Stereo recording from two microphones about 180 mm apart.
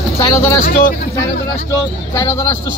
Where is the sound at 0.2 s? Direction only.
15° left (ahead or behind).